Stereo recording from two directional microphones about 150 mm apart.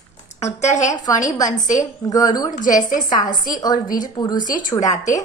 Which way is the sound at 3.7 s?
65° left (ahead or behind).